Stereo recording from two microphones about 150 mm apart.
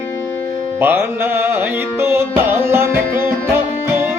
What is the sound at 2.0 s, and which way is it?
Music, 15° right (ahead or behind).